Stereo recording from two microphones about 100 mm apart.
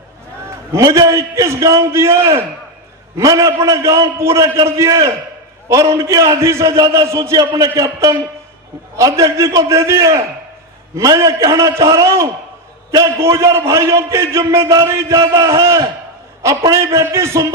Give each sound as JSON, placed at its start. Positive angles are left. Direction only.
{"t": 0.7, "sound": "a man's voice", "side_deg": -35}